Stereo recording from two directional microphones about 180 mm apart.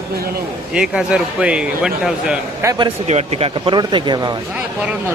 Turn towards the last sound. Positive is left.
turn(degrees=-25)  # may be behind; listen again after turning